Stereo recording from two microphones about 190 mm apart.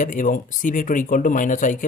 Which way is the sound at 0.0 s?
45° left (ahead or behind).